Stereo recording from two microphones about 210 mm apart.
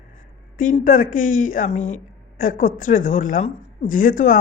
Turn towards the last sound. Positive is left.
turn(degrees=40)  # may be behind; listen again after turning